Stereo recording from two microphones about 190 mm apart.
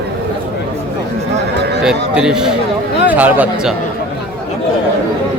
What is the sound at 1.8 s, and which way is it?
Speech, 5° right (ahead or behind).